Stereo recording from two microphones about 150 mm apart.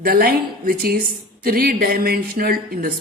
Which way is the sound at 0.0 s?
80° right.